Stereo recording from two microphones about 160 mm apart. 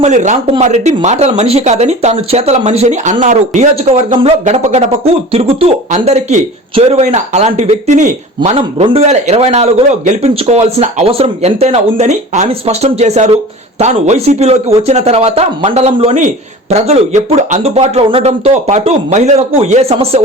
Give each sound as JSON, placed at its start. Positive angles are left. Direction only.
{"t": 0.0, "sound": "a man's voice", "side_deg": -50}
{"t": 8.4, "sound": "a man's voice", "side_deg": -35}